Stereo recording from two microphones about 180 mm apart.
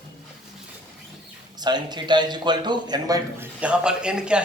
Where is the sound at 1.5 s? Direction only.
25° right (ahead or behind).